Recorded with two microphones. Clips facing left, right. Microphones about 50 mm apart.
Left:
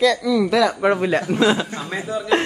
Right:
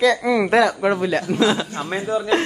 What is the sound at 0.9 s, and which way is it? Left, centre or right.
Speech, left.